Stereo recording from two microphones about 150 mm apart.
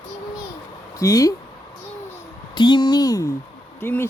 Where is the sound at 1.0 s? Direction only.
25° left (ahead or behind).